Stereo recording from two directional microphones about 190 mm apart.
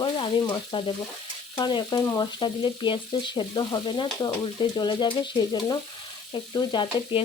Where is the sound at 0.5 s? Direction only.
25° left (ahead or behind).